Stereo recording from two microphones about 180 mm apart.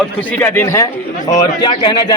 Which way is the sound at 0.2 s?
10° left (ahead or behind).